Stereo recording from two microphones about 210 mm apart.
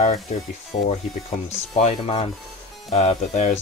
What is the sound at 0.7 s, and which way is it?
Speech, 25° left (ahead or behind).